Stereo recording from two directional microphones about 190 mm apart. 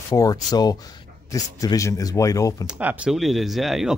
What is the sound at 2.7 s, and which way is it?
Speech, 5° right (ahead or behind).